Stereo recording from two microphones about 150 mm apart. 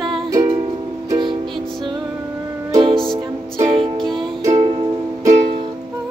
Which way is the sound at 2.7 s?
35° right (ahead or behind).